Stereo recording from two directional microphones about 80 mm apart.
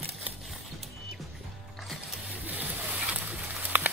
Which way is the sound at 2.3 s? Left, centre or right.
Right.